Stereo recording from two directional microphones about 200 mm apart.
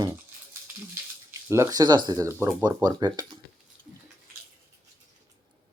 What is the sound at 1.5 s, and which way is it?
Speech, 15° right (ahead or behind).